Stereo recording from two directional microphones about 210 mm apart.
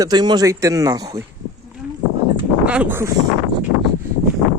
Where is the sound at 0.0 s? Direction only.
20° right (ahead or behind).